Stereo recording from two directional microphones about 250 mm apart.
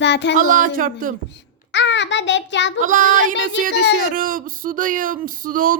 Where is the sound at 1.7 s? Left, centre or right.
Left.